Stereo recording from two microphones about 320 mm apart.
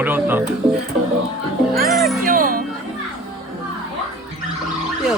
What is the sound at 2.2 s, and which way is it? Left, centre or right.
Music, right.